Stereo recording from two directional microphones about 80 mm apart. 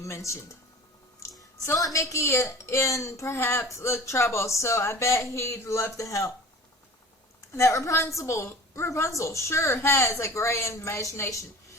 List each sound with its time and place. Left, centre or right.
0.0 s a woman's voice: left
7.5 s a woman's voice: left